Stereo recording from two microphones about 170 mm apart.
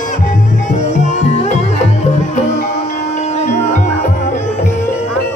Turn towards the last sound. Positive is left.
turn(degrees=45)  # may be behind; listen again after turning